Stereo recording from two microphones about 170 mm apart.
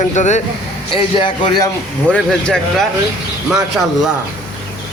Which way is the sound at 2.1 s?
5° left (ahead or behind).